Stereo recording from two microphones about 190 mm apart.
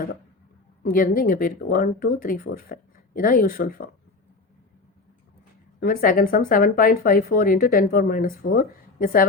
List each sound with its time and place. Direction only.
0.9 s speech: 45° left (ahead or behind)
5.8 s speech: 50° left (ahead or behind)